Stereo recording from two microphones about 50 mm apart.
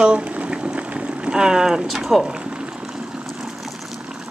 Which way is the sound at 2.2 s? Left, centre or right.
Centre.